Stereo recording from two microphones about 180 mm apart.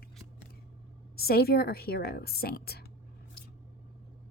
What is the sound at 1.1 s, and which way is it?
Speech, 60° left (ahead or behind).